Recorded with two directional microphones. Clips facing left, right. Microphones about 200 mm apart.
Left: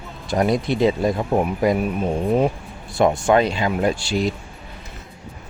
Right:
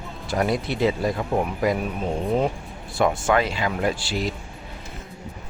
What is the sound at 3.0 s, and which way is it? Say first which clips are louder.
Speech: left 4 dB; 20° left (ahead or behind).